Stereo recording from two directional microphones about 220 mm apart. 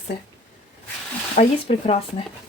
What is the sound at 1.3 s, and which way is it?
Speech, 30° left (ahead or behind).